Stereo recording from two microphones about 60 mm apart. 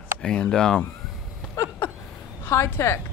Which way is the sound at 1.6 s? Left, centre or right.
Left.